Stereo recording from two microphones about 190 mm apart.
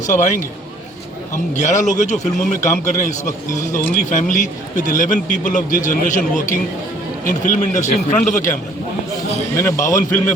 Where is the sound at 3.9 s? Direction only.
45° left (ahead or behind).